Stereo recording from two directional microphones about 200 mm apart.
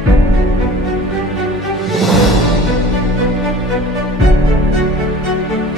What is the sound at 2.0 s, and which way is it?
Music, centre (ahead or behind).